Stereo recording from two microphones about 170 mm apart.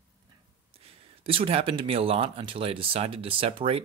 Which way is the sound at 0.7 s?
35° right (ahead or behind).